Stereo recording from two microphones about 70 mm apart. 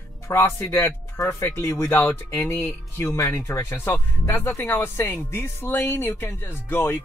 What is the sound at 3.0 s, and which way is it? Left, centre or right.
Speech, left.